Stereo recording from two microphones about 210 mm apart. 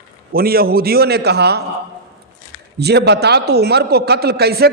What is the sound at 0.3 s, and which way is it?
A man's voice, 45° right (ahead or behind).